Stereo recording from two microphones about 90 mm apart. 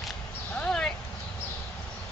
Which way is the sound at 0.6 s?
5° left (ahead or behind).